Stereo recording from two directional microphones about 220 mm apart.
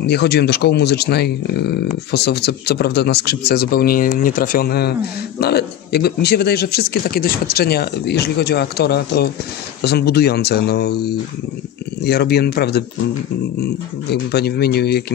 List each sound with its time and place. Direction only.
0.0 s speech: 50° left (ahead or behind)
14.3 s speech: 45° left (ahead or behind)